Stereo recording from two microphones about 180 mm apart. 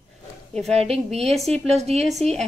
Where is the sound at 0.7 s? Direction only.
35° right (ahead or behind).